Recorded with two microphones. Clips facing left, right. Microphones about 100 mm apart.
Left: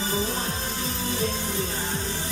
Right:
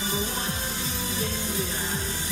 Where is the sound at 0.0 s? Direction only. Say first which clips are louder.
Left 2 dB; 30° left (ahead or behind).